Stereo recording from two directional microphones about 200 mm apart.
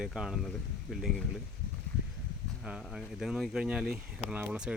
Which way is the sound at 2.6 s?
5° right (ahead or behind).